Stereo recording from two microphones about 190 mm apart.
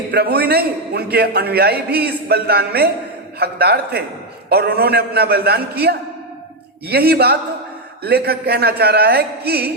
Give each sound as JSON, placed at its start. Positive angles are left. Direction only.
{"t": 0.1, "sound": "a man's voice", "side_deg": -55}